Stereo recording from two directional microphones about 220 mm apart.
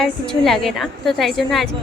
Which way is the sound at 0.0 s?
Centre (ahead or behind).